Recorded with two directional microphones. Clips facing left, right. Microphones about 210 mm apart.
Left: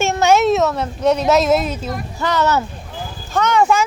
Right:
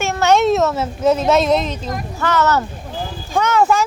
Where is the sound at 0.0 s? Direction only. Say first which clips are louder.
Left 2 dB; 25° left (ahead or behind).